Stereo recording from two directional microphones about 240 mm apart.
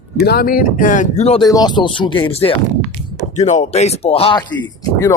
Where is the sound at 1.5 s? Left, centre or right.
Centre.